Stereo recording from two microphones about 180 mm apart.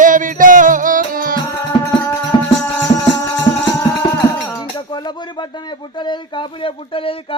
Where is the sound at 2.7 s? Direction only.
15° left (ahead or behind).